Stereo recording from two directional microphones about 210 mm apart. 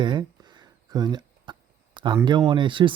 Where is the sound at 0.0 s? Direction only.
20° right (ahead or behind).